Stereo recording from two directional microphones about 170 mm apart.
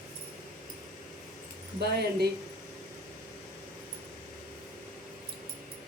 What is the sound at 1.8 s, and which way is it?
Speech, 70° right (ahead or behind).